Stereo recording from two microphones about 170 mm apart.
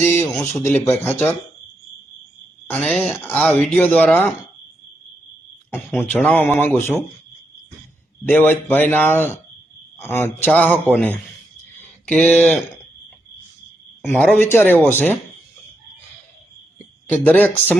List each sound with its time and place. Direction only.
0.0 s speech: 15° left (ahead or behind)
0.3 s speech: centre (ahead or behind)
0.6 s speech: 15° left (ahead or behind)
2.6 s speech: 5° left (ahead or behind)
5.7 s speech: 10° left (ahead or behind)
8.2 s speech: 10° left (ahead or behind)
11.8 s a sound: 10° left (ahead or behind)
14.1 s speech: 10° left (ahead or behind)
17.1 s speech: 10° left (ahead or behind)